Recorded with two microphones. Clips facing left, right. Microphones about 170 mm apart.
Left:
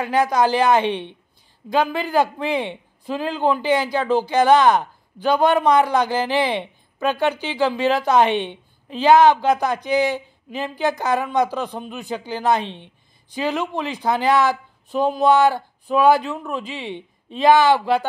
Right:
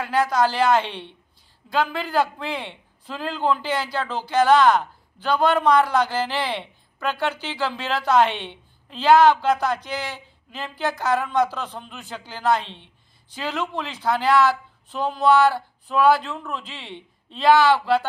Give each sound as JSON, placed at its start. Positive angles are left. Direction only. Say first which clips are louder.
{"t": 0.0, "sound": "speech", "louder": "left 3 dB", "side_deg": 15}